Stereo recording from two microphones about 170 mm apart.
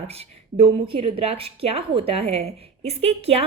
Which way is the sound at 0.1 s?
35° right (ahead or behind).